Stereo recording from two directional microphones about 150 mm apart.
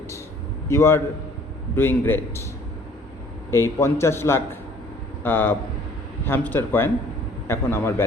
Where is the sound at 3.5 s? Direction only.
20° left (ahead or behind).